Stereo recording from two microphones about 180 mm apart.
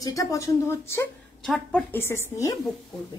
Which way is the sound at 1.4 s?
Centre (ahead or behind).